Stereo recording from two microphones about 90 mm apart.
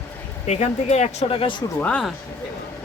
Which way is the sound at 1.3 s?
80° left.